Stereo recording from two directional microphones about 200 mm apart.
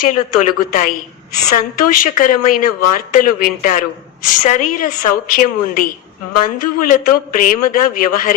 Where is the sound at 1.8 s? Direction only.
45° left (ahead or behind).